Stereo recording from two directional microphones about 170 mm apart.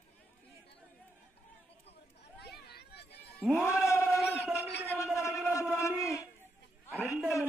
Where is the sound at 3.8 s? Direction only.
15° left (ahead or behind).